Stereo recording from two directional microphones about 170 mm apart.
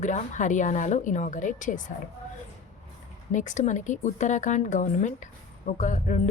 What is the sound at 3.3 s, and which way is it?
A woman's voice, 45° left (ahead or behind).